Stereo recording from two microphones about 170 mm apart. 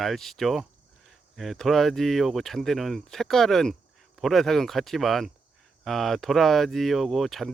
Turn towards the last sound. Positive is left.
turn(degrees=0)  # may be behind; listen again after turning